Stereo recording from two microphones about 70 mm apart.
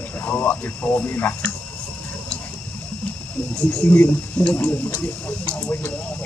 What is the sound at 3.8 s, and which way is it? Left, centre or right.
Speech, left.